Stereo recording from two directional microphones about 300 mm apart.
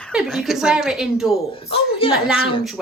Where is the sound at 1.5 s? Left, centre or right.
Centre.